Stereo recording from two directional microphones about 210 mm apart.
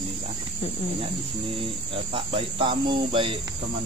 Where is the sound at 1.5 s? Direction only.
25° right (ahead or behind).